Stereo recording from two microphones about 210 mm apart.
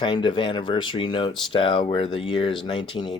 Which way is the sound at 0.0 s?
20° left (ahead or behind).